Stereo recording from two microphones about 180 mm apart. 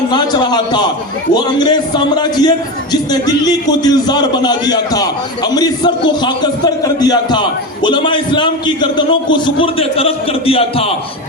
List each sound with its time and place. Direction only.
0.1 s a man's voice: 25° left (ahead or behind)